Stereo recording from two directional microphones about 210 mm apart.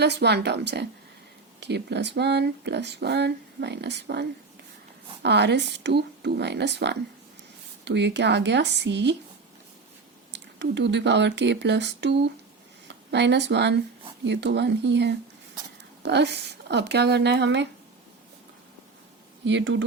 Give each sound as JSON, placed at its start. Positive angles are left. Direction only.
{"t": 0.0, "sound": "speech", "side_deg": -50}
{"t": 10.3, "sound": "speech", "side_deg": -55}
{"t": 19.5, "sound": "speech", "side_deg": -60}